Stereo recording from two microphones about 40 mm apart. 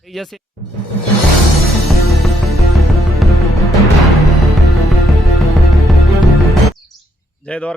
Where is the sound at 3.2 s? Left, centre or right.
Centre.